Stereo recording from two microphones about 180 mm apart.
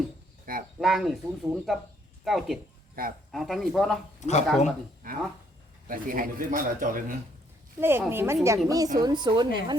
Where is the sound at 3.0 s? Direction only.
55° right (ahead or behind).